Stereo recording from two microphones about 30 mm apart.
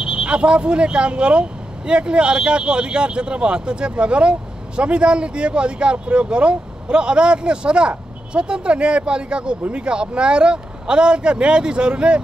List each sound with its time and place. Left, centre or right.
0.0 s speech: right